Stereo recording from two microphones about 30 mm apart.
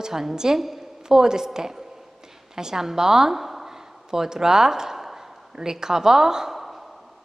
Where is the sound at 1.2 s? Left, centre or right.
Centre.